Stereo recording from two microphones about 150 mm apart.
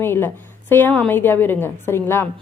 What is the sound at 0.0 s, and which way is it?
Speech, 15° left (ahead or behind).